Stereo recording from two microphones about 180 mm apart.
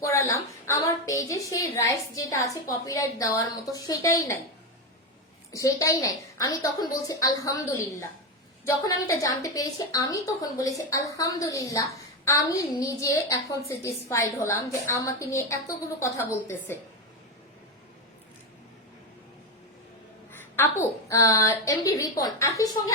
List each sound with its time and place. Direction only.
0.0 s a woman's voice: 15° left (ahead or behind)
5.5 s a woman's voice: 15° left (ahead or behind)
20.6 s a woman's voice: 15° left (ahead or behind)